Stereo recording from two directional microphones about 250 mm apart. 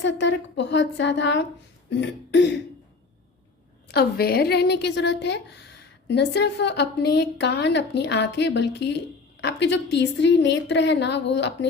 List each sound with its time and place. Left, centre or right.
0.0 s speech: left
3.8 s speech: left